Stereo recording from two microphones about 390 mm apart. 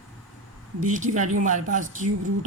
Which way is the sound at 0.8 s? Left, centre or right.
Centre.